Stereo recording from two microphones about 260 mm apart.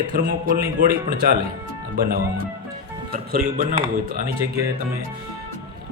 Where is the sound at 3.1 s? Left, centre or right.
Right.